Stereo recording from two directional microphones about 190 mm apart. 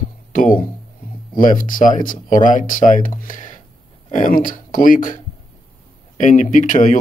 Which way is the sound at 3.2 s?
45° left (ahead or behind).